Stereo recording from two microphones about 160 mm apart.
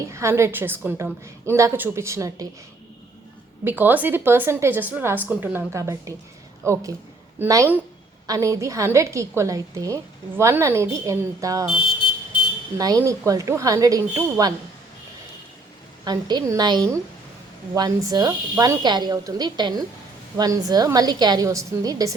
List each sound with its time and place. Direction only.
0.0 s a woman's voice: 20° right (ahead or behind)
3.6 s a woman's voice: 10° right (ahead or behind)
12.7 s a woman's voice: 25° right (ahead or behind)
16.0 s a woman's voice: 25° right (ahead or behind)